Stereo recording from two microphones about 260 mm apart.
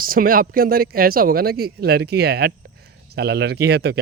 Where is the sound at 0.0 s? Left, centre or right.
Right.